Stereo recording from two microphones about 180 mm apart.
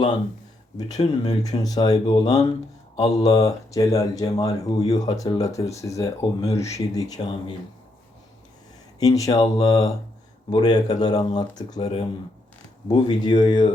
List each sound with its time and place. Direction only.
0.8 s speech: 20° left (ahead or behind)
9.0 s speech: 20° left (ahead or behind)